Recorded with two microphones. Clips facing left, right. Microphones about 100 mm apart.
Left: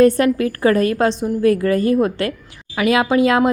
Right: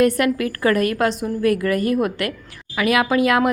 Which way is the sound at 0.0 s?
30° left (ahead or behind).